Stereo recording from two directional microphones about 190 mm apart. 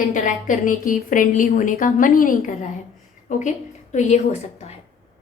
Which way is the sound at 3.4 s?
40° left (ahead or behind).